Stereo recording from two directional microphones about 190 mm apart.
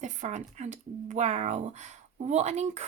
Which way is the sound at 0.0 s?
40° right (ahead or behind).